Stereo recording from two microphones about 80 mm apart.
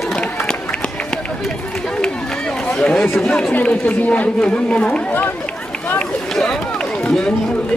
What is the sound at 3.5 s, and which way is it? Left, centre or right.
Speech, centre.